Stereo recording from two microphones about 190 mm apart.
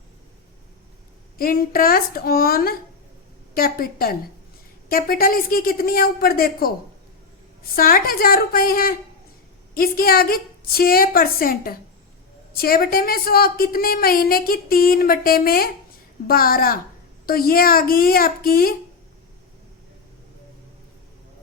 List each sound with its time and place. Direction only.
1.4 s a woman's voice: 50° left (ahead or behind)